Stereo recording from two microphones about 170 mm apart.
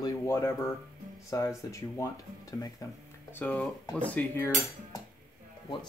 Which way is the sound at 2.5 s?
20° left (ahead or behind).